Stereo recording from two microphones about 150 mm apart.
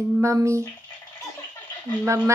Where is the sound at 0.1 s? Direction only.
20° right (ahead or behind).